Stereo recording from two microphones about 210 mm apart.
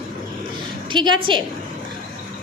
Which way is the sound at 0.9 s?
20° right (ahead or behind).